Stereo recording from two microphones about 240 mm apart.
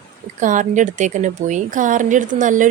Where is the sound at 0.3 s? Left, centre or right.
Right.